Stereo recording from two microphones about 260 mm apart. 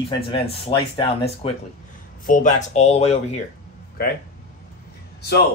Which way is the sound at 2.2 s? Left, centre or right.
Left.